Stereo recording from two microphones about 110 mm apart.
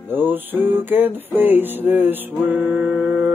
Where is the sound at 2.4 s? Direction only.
15° right (ahead or behind).